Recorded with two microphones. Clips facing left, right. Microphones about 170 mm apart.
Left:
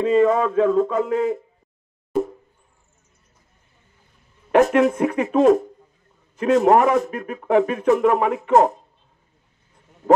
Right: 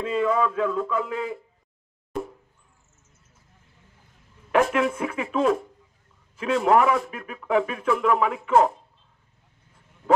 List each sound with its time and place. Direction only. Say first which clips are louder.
0.0 s speech: left 6 dB; 45° left (ahead or behind)
4.5 s speech: left 6 dB; 40° left (ahead or behind)